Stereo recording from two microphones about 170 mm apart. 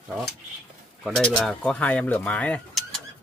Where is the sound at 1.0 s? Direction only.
Centre (ahead or behind).